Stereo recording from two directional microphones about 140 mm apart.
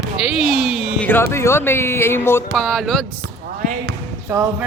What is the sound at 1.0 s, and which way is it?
Speech, 15° left (ahead or behind).